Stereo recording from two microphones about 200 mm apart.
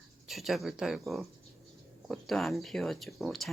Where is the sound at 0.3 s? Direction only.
Centre (ahead or behind).